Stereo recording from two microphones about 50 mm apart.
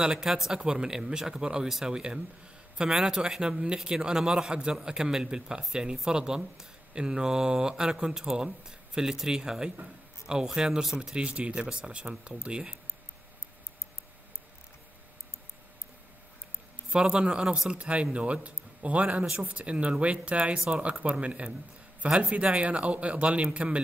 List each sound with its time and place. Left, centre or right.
0.0 s speech: centre
16.9 s speech: centre
20.5 s speech: centre
21.0 s speech: right